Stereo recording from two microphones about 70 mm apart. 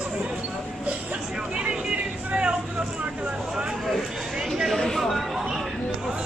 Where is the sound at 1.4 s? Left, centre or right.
Centre.